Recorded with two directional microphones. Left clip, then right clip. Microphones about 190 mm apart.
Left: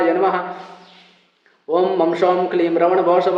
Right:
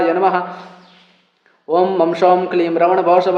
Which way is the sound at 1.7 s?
35° right (ahead or behind).